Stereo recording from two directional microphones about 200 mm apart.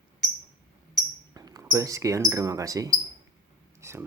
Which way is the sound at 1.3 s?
20° right (ahead or behind).